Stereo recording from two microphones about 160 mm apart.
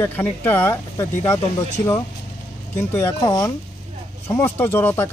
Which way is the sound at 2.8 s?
15° left (ahead or behind).